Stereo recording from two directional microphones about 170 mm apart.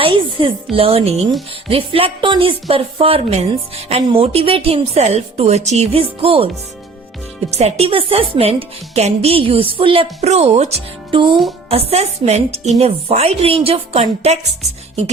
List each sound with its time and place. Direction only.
0.0 s a woman's voice: 30° right (ahead or behind)
7.6 s a woman's voice: 35° right (ahead or behind)